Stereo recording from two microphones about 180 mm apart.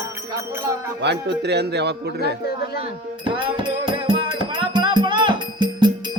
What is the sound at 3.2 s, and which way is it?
Music, 25° right (ahead or behind).